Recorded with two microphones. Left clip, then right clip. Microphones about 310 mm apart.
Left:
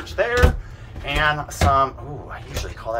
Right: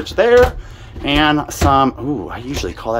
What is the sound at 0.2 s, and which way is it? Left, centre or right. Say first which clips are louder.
Speech: right 9 dB; right.